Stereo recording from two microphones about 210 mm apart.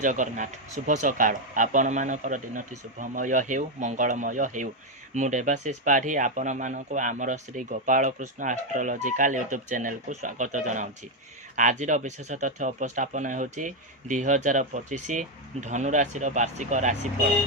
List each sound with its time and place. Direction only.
0.0 s speech: 35° right (ahead or behind)